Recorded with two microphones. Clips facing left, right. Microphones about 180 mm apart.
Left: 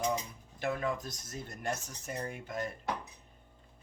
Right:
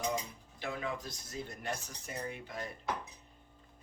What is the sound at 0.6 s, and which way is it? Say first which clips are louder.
Speech: left 5 dB; 45° left (ahead or behind).